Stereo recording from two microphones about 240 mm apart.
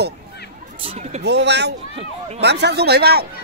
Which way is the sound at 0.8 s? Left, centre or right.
Right.